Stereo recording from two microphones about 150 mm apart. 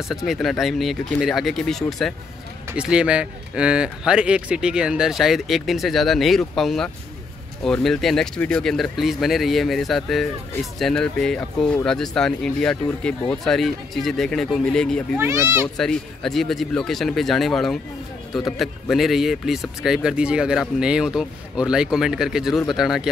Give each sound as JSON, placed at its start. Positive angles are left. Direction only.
{"t": 0.1, "sound": "speech", "side_deg": 0}
{"t": 15.1, "sound": "a child's voice", "side_deg": -15}
{"t": 15.8, "sound": "speech", "side_deg": 5}